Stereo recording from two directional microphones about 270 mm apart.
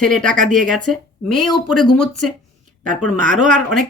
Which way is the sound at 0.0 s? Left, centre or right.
Centre.